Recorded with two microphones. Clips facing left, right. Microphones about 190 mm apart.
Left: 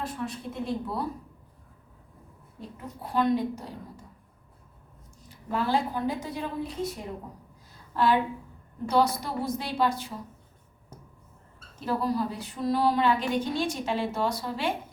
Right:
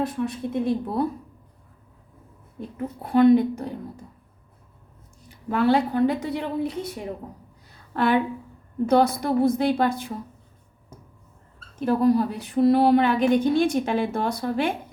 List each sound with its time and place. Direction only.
0.0 s speech: 60° right (ahead or behind)
2.6 s speech: 60° right (ahead or behind)
5.5 s speech: 65° right (ahead or behind)
7.7 s a sound: 60° right (ahead or behind)
8.9 s speech: 55° right (ahead or behind)
11.8 s speech: 55° right (ahead or behind)